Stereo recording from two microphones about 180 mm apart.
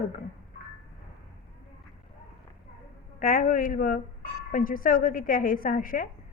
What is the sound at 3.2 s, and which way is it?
A woman's voice, 50° left (ahead or behind).